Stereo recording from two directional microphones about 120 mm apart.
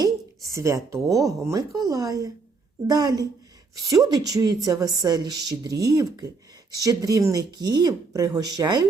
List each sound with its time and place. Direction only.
0.0 s a woman's voice: 25° right (ahead or behind)